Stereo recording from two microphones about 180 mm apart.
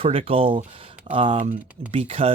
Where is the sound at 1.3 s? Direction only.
45° right (ahead or behind).